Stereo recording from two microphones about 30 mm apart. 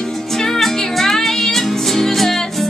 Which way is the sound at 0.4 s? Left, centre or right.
Centre.